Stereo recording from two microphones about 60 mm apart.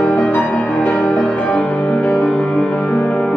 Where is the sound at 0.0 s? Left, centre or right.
Centre.